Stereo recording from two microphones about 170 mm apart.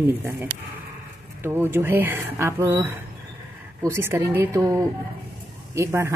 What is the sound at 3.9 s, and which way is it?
Speech, 15° right (ahead or behind).